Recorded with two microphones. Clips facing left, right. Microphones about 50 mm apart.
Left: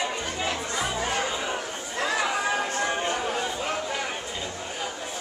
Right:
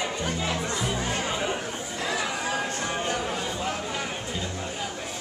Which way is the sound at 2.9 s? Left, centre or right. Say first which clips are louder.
Left 1 dB; centre.